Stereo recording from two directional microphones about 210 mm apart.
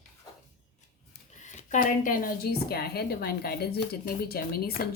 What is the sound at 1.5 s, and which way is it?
A woman's voice, 35° left (ahead or behind).